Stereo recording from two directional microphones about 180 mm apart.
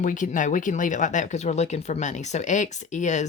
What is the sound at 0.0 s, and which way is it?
Speech, 45° left (ahead or behind).